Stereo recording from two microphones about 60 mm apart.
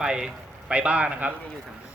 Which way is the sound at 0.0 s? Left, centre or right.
Centre.